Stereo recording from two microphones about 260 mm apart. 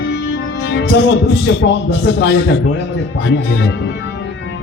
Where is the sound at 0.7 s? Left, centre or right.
Left.